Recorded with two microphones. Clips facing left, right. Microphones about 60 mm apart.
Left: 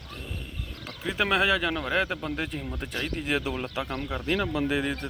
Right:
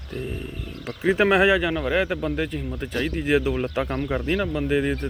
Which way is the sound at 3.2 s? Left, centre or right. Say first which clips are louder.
Right 8 dB; right.